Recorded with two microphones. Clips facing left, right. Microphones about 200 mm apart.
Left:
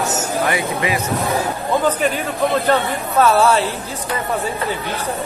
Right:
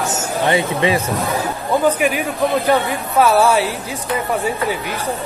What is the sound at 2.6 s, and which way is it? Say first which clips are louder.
Speech: right 1 dB; 10° right (ahead or behind).